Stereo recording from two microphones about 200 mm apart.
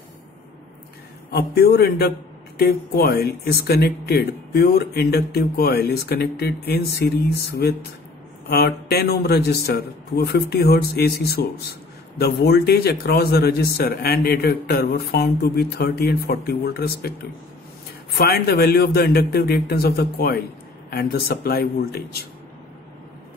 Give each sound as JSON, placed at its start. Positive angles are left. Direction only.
{"t": 1.3, "sound": "speech", "side_deg": 55}
{"t": 8.5, "sound": "speech", "side_deg": 55}
{"t": 18.1, "sound": "speech", "side_deg": 50}